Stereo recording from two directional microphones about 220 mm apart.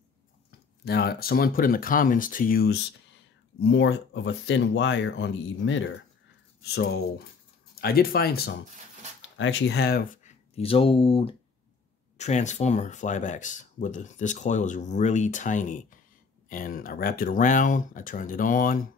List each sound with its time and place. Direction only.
0.8 s speech: 45° left (ahead or behind)
3.6 s speech: 55° left (ahead or behind)
6.6 s speech: 50° left (ahead or behind)
9.4 s speech: 60° left (ahead or behind); by 18.9 s 40° left (ahead or behind)